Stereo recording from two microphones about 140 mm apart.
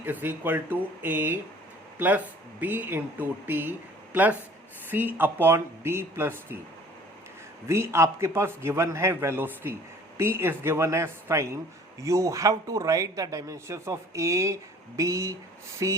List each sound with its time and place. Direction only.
0.0 s speech: 15° right (ahead or behind)
7.7 s speech: 20° right (ahead or behind)